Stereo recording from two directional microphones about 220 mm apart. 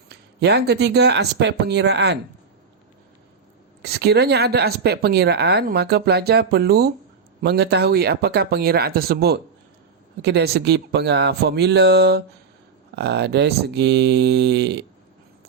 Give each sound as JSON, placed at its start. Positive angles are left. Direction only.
{"t": 0.1, "sound": "speech", "side_deg": -50}
{"t": 3.8, "sound": "speech", "side_deg": -45}